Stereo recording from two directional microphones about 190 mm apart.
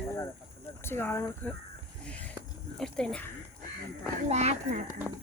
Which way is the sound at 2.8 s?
5° left (ahead or behind).